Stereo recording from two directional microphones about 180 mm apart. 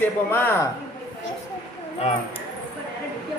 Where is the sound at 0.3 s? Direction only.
10° left (ahead or behind).